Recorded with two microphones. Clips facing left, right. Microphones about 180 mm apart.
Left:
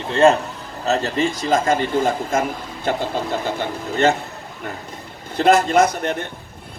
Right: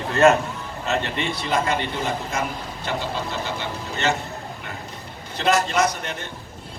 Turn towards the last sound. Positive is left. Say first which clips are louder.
# left 6 dB
turn(degrees=55)  # may be behind; listen again after turning